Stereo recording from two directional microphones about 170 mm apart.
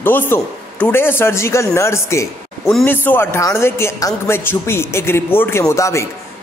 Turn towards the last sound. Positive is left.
turn(degrees=15)  # may be behind; listen again after turning